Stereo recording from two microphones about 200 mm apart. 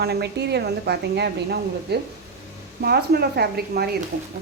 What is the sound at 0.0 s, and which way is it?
A woman's voice, 55° right (ahead or behind).